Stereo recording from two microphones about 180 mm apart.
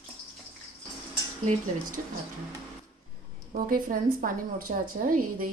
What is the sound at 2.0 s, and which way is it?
Speech, 45° right (ahead or behind).